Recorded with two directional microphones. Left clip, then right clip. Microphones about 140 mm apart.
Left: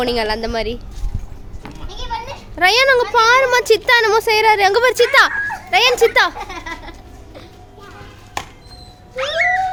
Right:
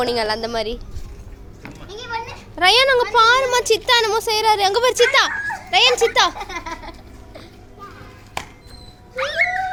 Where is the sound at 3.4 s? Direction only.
35° left (ahead or behind).